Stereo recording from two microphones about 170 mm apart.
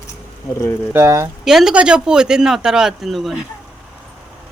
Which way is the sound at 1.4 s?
5° right (ahead or behind).